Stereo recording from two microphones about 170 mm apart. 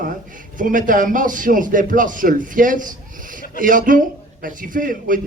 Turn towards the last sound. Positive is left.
turn(degrees=-50)  # may be behind; listen again after turning